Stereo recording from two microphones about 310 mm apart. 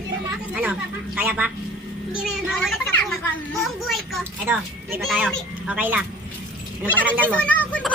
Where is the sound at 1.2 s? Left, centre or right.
Centre.